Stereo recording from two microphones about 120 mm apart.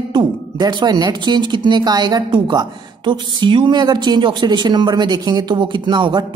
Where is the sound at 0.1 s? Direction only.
40° right (ahead or behind).